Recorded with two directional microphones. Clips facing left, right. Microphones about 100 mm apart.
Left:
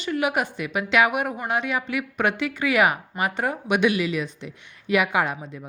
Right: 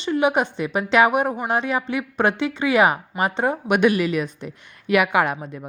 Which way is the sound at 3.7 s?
45° right (ahead or behind).